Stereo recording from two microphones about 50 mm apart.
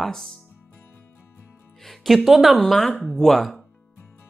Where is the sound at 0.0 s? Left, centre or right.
Centre.